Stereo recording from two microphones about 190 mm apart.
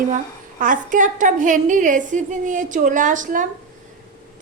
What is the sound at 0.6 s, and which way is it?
A woman's voice, 45° right (ahead or behind).